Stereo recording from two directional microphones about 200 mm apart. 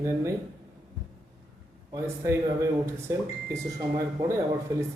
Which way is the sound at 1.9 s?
15° right (ahead or behind).